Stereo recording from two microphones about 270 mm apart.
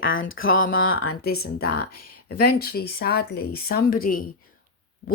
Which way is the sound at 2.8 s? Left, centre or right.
Left.